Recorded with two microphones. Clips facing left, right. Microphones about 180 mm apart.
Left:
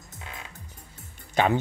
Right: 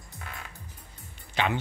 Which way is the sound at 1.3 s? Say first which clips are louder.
Left 6 dB; 45° left (ahead or behind).